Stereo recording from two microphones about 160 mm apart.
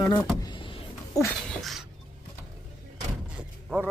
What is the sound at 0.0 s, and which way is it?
Speech, 20° left (ahead or behind).